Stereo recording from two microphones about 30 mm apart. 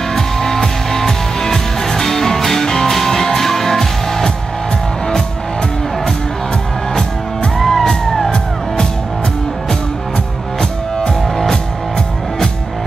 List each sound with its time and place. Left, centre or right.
0.1 s music: centre
7.5 s music: centre
10.6 s music: centre